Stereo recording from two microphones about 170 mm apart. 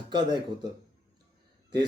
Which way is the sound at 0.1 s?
25° right (ahead or behind).